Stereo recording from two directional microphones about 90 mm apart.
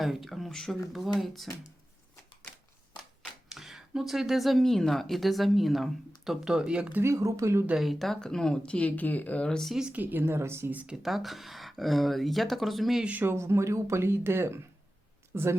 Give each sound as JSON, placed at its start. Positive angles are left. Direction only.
{"t": 0.0, "sound": "speech", "side_deg": 0}
{"t": 3.5, "sound": "speech", "side_deg": -5}
{"t": 7.0, "sound": "speech", "side_deg": -35}
{"t": 7.8, "sound": "speech", "side_deg": 0}
{"t": 9.7, "sound": "speech", "side_deg": -10}
{"t": 10.0, "sound": "speech", "side_deg": -20}
{"t": 10.9, "sound": "speech", "side_deg": -5}
{"t": 13.1, "sound": "speech", "side_deg": -20}